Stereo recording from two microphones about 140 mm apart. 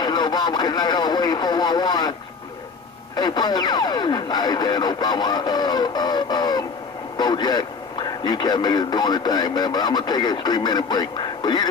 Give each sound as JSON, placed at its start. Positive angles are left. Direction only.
{"t": 0.0, "sound": "radio", "side_deg": 30}
{"t": 3.2, "sound": "a man's voice", "side_deg": 30}